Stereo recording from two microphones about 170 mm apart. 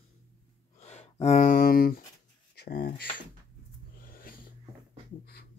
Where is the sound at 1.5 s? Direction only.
60° left (ahead or behind).